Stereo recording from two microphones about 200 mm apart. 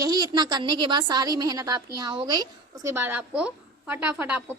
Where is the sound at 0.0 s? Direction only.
20° right (ahead or behind).